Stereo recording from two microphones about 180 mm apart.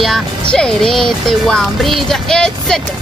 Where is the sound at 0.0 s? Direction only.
5° left (ahead or behind).